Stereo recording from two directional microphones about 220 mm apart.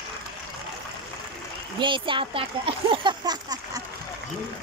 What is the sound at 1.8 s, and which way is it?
Speech, 20° right (ahead or behind).